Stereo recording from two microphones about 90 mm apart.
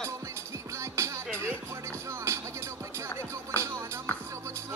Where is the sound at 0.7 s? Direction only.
35° right (ahead or behind).